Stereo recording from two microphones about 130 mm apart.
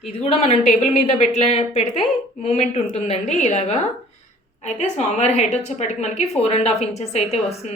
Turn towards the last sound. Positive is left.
turn(degrees=55)  # may be behind; listen again after turning